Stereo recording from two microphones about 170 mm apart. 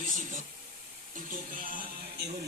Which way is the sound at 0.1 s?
50° right (ahead or behind).